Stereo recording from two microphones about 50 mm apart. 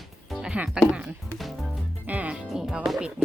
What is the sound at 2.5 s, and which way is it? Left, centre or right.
Music, centre.